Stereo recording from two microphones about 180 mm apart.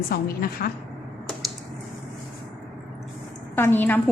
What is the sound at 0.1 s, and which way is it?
Speech, 55° left (ahead or behind).